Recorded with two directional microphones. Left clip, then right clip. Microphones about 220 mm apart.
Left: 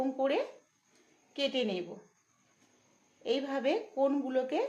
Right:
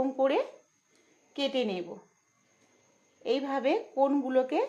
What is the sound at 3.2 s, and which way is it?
Speech, 20° right (ahead or behind).